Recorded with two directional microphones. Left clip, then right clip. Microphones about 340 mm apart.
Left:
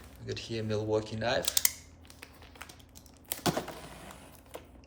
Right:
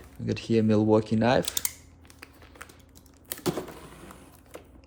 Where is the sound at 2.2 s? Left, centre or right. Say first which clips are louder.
Right 2 dB; centre.